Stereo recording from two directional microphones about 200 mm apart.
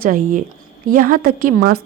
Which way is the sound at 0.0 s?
40° right (ahead or behind).